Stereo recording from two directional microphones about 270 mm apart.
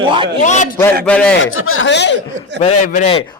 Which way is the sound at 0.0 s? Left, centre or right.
Centre.